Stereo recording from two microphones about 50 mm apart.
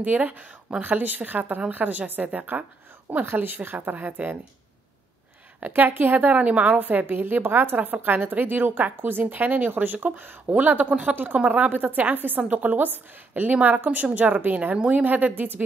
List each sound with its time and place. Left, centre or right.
0.0 s a woman's voice: right
5.6 s a woman's voice: right